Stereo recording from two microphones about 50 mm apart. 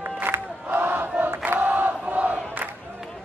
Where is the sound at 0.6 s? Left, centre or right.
Right.